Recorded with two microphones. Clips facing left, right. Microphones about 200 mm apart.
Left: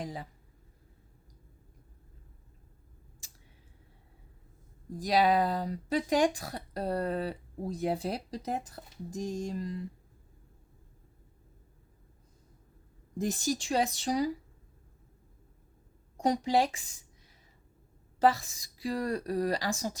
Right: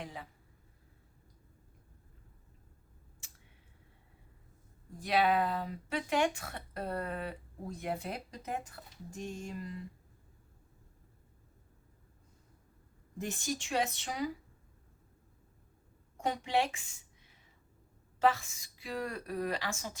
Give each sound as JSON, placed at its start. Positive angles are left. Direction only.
{"t": 0.0, "sound": "speech", "side_deg": 35}
{"t": 4.9, "sound": "speech", "side_deg": 35}
{"t": 13.1, "sound": "speech", "side_deg": 35}
{"t": 16.2, "sound": "a woman's voice", "side_deg": 35}